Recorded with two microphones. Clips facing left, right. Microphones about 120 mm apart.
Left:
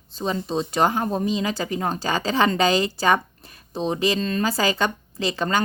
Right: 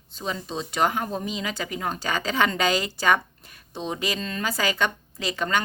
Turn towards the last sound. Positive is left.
turn(degrees=35)  # may be behind; listen again after turning